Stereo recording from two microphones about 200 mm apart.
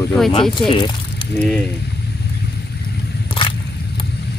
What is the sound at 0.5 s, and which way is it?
Speech, 25° left (ahead or behind).